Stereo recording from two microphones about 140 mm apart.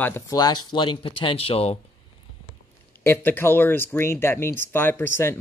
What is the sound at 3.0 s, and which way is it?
Speech, 15° left (ahead or behind).